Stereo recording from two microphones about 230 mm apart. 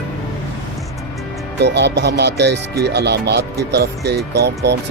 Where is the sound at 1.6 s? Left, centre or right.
Right.